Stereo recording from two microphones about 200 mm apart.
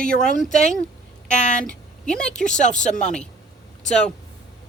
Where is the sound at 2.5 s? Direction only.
35° left (ahead or behind).